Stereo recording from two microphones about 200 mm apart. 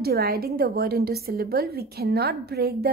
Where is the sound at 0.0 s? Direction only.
50° right (ahead or behind).